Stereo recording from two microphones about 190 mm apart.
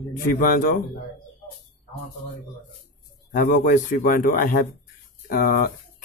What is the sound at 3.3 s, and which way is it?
Speech, 45° left (ahead or behind).